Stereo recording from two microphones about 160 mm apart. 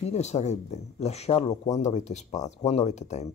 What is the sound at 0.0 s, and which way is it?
Speech, 45° left (ahead or behind).